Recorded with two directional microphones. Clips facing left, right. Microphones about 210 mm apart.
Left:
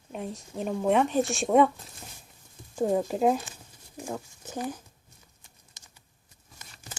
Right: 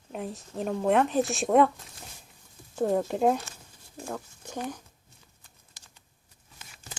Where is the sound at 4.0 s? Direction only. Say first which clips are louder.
Left 1 dB; 15° left (ahead or behind).